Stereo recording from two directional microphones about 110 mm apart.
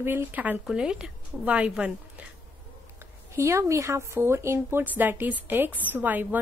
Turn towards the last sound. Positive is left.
turn(degrees=-15)  # may be behind; listen again after turning